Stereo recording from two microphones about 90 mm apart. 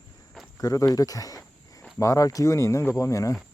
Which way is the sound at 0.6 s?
40° left (ahead or behind).